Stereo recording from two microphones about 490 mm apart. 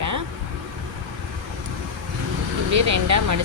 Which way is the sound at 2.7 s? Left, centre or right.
Right.